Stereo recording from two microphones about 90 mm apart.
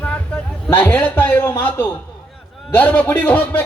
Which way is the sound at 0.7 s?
20° left (ahead or behind).